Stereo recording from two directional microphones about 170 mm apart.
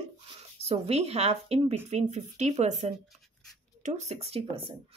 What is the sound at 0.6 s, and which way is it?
A woman's voice, 40° right (ahead or behind).